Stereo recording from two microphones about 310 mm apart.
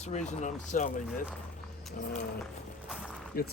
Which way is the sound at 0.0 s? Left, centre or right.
Left.